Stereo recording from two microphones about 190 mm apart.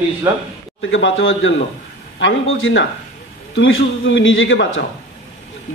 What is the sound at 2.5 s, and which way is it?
A man's voice, 85° left.